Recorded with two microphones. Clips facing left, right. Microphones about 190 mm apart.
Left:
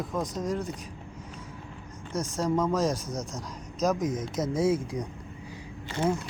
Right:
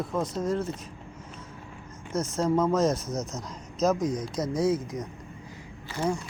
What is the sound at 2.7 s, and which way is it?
Speech, 15° left (ahead or behind).